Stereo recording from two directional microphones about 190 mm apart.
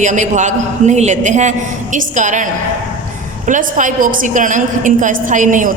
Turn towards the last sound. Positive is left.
turn(degrees=-40)  # may be behind; listen again after turning